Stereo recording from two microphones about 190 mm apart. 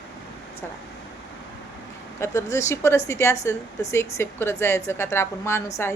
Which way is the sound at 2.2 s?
15° left (ahead or behind).